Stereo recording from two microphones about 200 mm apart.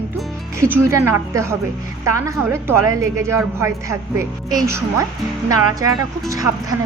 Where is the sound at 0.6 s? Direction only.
15° right (ahead or behind).